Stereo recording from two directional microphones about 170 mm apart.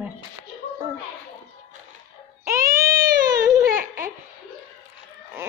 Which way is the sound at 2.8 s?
20° right (ahead or behind).